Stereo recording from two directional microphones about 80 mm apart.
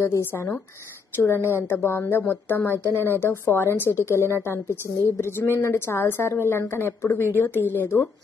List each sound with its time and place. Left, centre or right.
0.0 s a woman's voice: left